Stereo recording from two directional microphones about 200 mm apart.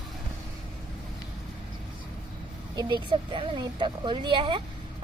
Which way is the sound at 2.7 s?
25° right (ahead or behind).